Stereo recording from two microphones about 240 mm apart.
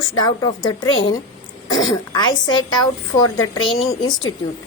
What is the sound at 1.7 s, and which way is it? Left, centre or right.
A woman's voice, centre.